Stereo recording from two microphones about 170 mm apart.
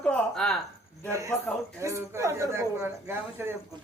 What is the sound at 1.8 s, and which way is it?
A woman's voice, 15° right (ahead or behind).